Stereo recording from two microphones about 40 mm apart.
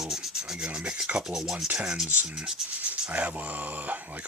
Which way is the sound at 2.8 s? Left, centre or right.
Right.